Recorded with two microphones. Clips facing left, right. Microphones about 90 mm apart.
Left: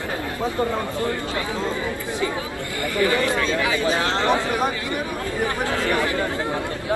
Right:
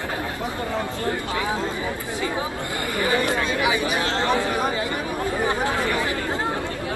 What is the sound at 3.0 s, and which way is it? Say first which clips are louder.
Speech: left 2 dB; 20° right (ahead or behind).